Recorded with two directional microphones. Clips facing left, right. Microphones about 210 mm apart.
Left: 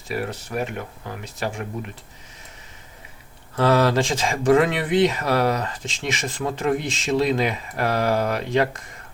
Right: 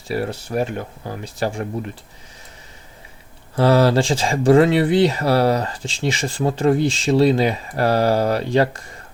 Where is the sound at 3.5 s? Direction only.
30° right (ahead or behind).